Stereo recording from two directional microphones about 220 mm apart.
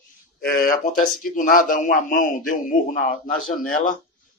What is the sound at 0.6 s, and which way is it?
A man's voice, 40° left (ahead or behind).